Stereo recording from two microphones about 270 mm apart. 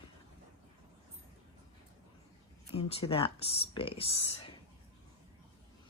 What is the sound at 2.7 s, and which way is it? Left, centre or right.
Speech, left.